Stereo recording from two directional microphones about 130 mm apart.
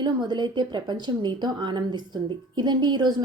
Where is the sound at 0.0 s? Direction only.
35° right (ahead or behind).